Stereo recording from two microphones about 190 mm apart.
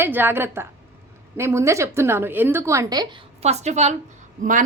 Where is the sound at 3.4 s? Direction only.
35° right (ahead or behind).